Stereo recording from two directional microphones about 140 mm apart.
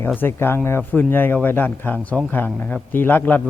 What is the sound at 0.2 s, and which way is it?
Speech, 15° left (ahead or behind).